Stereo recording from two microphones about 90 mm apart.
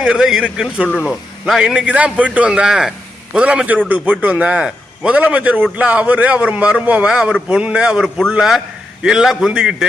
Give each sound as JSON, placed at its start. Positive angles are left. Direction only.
{"t": 0.0, "sound": "a man's voice", "side_deg": -5}